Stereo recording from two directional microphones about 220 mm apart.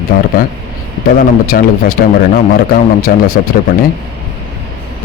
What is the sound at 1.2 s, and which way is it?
A man's voice, 40° left (ahead or behind).